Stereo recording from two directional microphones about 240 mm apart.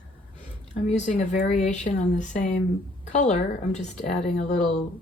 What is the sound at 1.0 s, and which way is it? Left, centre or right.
Speech, left.